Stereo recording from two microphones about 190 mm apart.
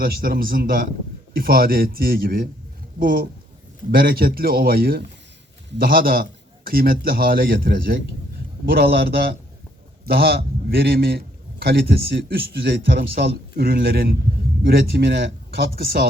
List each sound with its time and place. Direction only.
0.0 s speech: 50° right (ahead or behind)